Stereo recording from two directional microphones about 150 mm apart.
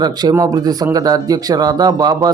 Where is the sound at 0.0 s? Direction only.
25° right (ahead or behind).